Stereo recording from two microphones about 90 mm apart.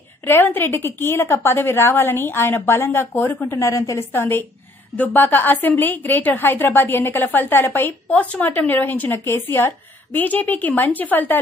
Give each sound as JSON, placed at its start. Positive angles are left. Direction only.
{"t": 0.2, "sound": "a woman's voice", "side_deg": 25}
{"t": 4.0, "sound": "a woman's voice", "side_deg": 25}